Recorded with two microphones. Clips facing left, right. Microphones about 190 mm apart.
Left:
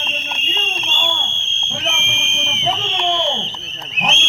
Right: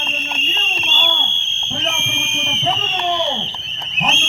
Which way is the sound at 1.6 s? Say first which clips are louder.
Right 1 dB; 15° left (ahead or behind).